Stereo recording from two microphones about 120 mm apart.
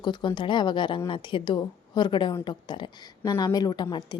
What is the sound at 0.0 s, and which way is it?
A woman's voice, 40° left (ahead or behind).